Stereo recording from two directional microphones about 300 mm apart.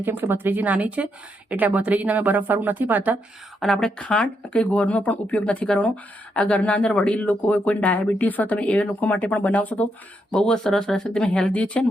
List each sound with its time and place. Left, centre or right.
0.0 s speech: centre